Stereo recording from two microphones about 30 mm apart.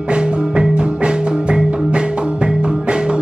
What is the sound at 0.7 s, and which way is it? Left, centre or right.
Music, right.